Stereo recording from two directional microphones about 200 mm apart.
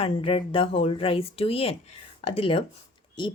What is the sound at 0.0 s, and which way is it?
Speech, 30° left (ahead or behind).